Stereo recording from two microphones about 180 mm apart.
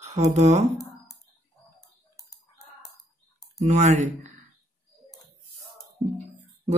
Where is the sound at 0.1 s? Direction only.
35° right (ahead or behind).